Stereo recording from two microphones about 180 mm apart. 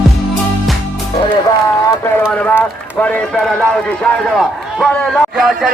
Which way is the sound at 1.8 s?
15° left (ahead or behind).